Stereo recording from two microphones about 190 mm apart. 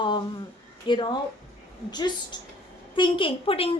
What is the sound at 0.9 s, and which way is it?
A woman's voice, 25° left (ahead or behind).